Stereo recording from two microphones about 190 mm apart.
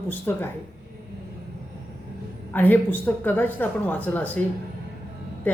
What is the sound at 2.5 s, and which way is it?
A woman's voice, 10° left (ahead or behind).